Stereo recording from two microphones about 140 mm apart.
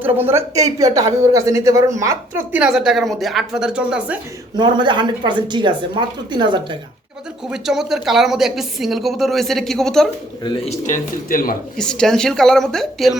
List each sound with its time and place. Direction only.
0.0 s a woman's voice: 15° right (ahead or behind)
2.6 s a woman's voice: 5° right (ahead or behind)
4.5 s speech: 35° right (ahead or behind)
7.5 s a woman's voice: 5° right (ahead or behind)
10.4 s a man's voice: 35° left (ahead or behind)
10.7 s speech: 65° left (ahead or behind); by 11.5 s 80° left
11.8 s a woman's voice: 5° left (ahead or behind)